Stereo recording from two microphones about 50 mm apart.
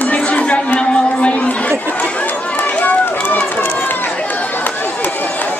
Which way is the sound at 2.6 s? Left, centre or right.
Left.